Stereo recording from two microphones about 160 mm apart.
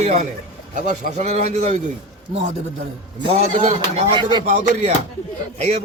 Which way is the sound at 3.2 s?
35° right (ahead or behind).